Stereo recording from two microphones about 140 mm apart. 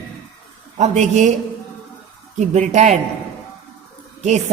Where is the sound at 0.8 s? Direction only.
60° right (ahead or behind).